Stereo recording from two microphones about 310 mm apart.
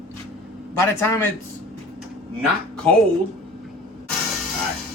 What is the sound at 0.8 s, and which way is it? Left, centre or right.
Speech, centre.